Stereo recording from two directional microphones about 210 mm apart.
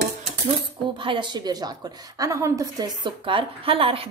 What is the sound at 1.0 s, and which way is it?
A woman's voice, 25° right (ahead or behind).